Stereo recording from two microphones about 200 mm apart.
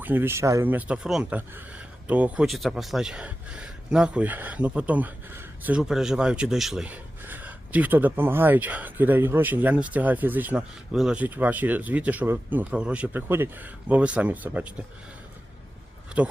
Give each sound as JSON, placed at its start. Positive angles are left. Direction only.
{"t": 0.0, "sound": "speech", "side_deg": -10}